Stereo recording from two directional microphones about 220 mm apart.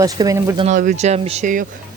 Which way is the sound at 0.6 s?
35° right (ahead or behind).